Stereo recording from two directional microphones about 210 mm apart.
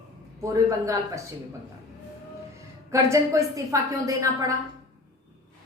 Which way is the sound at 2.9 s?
15° right (ahead or behind).